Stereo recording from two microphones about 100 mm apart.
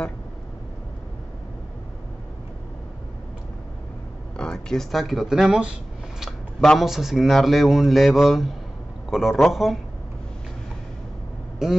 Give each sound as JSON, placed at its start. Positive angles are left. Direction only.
{"t": 4.4, "sound": "speech", "side_deg": 5}